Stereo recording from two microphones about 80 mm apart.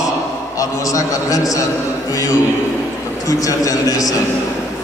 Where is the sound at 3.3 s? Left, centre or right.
Left.